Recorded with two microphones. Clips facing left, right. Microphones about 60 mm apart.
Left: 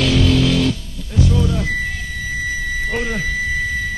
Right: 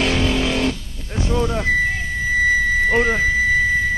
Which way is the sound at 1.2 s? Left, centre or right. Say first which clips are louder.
Left 1 dB; right.